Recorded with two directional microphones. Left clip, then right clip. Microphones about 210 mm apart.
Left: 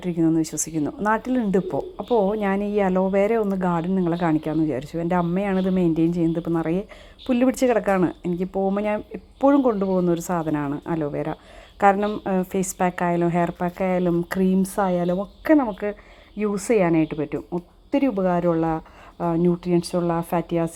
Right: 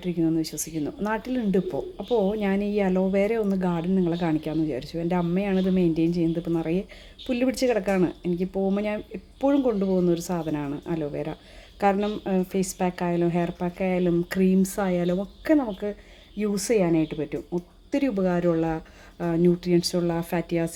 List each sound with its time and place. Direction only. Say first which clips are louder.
0.0 s speech: left 4 dB; 20° left (ahead or behind)